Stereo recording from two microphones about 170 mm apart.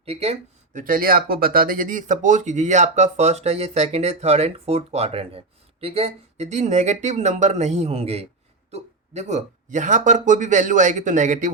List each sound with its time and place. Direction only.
0.0 s speech: 35° right (ahead or behind)